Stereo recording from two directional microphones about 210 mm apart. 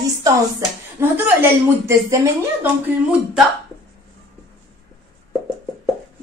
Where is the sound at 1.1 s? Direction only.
10° right (ahead or behind).